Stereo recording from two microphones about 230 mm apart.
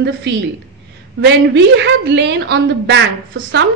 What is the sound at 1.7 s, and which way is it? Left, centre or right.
A woman's voice, right.